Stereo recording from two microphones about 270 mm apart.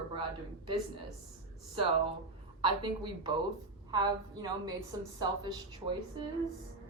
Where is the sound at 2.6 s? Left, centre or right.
Centre.